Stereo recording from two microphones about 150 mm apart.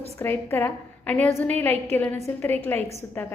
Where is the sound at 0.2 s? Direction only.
15° left (ahead or behind).